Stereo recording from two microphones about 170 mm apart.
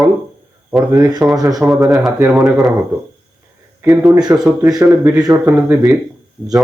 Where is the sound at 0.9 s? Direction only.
20° right (ahead or behind).